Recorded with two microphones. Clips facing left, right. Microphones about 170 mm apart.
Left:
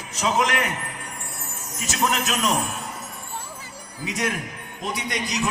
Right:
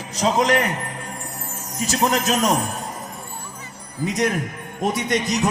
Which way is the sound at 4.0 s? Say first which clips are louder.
Right 6 dB; 40° right (ahead or behind).